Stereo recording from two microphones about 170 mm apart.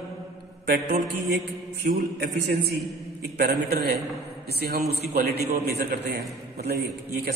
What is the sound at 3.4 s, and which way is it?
A man's voice, 65° right (ahead or behind).